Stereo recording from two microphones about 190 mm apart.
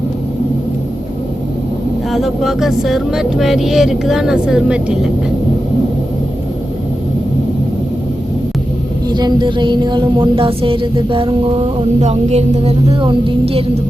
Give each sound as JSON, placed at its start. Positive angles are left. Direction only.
{"t": 2.1, "sound": "speech", "side_deg": 0}
{"t": 9.0, "sound": "music", "side_deg": -20}